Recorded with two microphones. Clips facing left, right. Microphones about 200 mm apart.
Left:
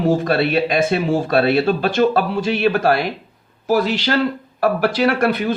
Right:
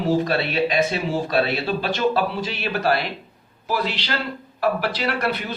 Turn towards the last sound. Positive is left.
turn(degrees=50)  # may be behind; listen again after turning